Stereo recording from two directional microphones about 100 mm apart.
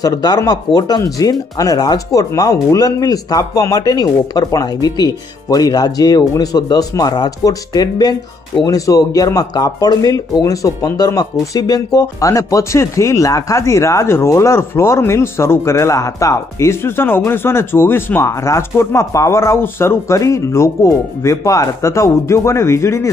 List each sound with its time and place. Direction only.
0.0 s speech: 40° left (ahead or behind)